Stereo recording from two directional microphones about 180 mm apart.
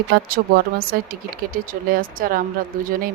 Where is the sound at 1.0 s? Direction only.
50° right (ahead or behind).